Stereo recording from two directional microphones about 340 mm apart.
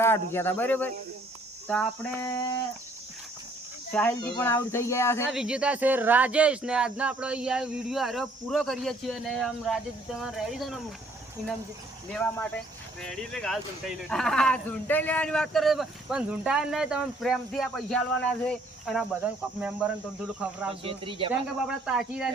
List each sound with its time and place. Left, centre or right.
0.0 s speech: centre
1.6 s a sound: centre
3.9 s speech: centre
12.1 s speech: centre
20.7 s speech: centre
21.6 s speech: centre